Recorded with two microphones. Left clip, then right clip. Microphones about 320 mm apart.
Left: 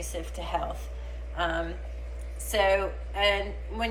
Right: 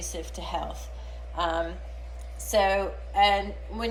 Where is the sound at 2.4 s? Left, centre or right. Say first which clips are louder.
Right 1 dB; centre.